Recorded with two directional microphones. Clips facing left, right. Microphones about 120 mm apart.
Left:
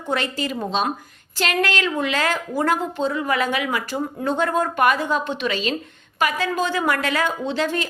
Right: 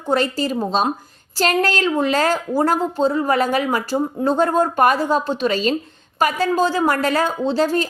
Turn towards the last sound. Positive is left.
turn(degrees=-35)  # may be behind; listen again after turning